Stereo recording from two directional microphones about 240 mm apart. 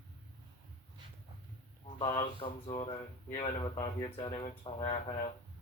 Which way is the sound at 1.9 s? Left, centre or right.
Centre.